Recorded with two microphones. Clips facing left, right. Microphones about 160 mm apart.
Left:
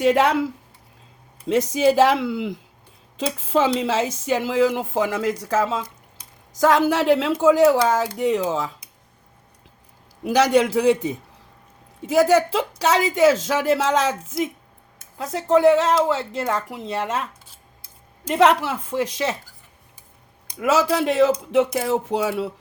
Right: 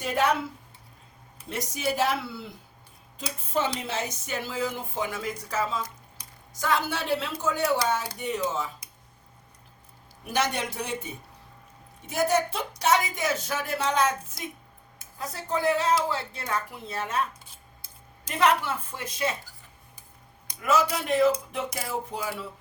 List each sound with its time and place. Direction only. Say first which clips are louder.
0.0 s speech: left 8 dB; 90° left
1.5 s speech: left 12 dB; 90° left
10.2 s speech: left 11 dB; 90° left
18.3 s speech: left 7 dB; 90° left
20.6 s speech: left 6 dB; 90° left